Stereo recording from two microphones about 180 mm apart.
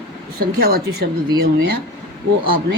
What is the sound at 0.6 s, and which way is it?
Speech, 60° right (ahead or behind).